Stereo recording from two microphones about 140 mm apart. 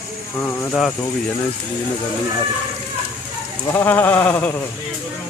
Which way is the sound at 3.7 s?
15° left (ahead or behind).